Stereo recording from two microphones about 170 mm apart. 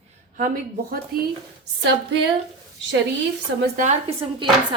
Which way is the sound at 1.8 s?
85° right.